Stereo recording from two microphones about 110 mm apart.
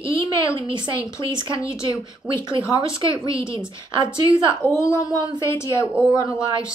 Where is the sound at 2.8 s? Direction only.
55° right (ahead or behind).